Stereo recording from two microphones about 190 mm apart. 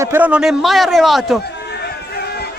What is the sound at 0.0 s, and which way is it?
A man's voice, 10° right (ahead or behind).